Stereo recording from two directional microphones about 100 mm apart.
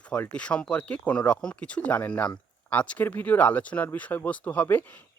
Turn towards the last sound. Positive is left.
turn(degrees=20)  # may be behind; listen again after turning